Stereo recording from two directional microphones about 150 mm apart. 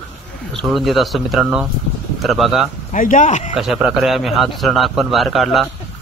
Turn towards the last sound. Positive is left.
turn(degrees=0)  # may be behind; listen again after turning